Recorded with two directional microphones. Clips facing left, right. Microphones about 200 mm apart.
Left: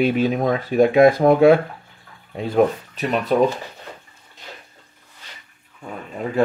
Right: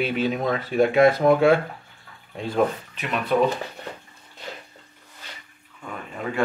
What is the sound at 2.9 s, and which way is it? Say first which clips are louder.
Speech: left 6 dB; 40° left (ahead or behind).